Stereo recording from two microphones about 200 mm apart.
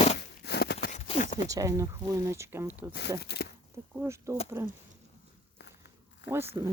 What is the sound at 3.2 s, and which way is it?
Speech, 55° left (ahead or behind).